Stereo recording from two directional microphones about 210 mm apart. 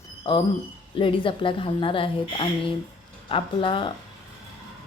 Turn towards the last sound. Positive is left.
turn(degrees=25)  # may be behind; listen again after turning